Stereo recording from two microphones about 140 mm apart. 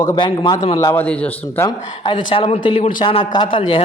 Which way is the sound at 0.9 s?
10° left (ahead or behind).